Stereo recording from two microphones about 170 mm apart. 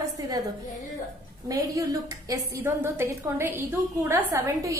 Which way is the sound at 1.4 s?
20° right (ahead or behind).